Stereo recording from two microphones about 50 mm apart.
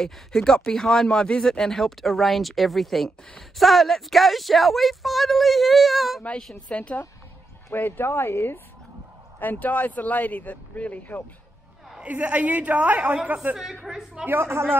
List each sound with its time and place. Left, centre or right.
0.0 s a woman's voice: centre
6.7 s a woman's voice: left
7.7 s speech: left
8.1 s speech: left
9.4 s speech: left
12.0 s a woman's voice: right
13.6 s a woman's voice: centre
14.2 s a woman's voice: right